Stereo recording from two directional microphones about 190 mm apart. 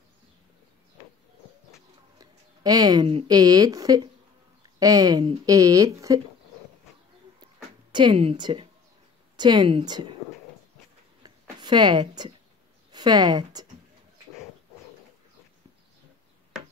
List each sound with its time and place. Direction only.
2.1 s speech: 20° right (ahead or behind)
7.9 s speech: 25° right (ahead or behind)
11.2 s a sound: 25° right (ahead or behind)
12.9 s a woman's voice: 20° right (ahead or behind)